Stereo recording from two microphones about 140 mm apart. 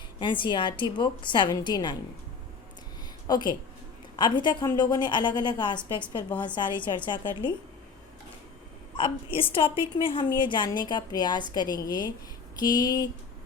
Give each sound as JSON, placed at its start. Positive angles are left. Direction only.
{"t": 0.2, "sound": "a woman's voice", "side_deg": 35}
{"t": 3.2, "sound": "a woman's voice", "side_deg": 30}
{"t": 9.0, "sound": "a woman's voice", "side_deg": 40}
{"t": 12.5, "sound": "a sound", "side_deg": 30}